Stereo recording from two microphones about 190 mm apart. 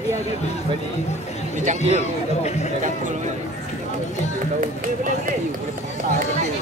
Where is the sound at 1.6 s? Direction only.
40° right (ahead or behind).